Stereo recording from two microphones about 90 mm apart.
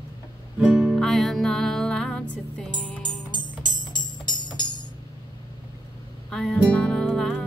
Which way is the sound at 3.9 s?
55° left (ahead or behind).